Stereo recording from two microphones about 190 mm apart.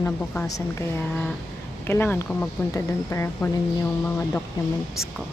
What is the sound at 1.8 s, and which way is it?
Speech, 10° left (ahead or behind).